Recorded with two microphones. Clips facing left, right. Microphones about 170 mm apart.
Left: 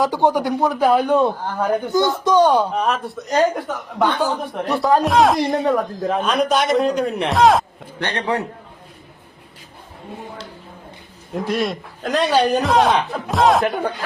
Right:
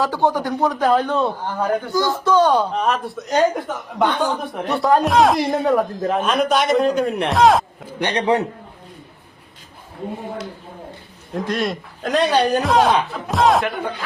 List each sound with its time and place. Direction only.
0.0 s a man's voice: 15° left (ahead or behind)
2.7 s a man's voice: centre (ahead or behind)
7.9 s a man's voice: 15° right (ahead or behind)
11.3 s a man's voice: 5° left (ahead or behind)